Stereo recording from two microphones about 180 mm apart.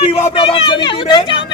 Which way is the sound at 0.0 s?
35° left (ahead or behind).